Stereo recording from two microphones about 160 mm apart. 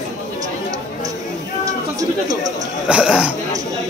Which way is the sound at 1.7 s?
20° right (ahead or behind).